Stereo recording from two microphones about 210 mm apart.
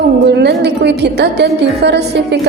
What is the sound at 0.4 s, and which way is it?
A woman's voice, 55° right (ahead or behind).